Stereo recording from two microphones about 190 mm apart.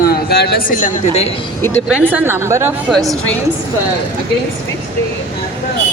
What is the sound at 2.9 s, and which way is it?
Speech, 5° left (ahead or behind).